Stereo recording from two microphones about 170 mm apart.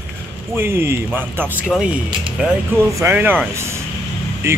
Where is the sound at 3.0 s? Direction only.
15° right (ahead or behind).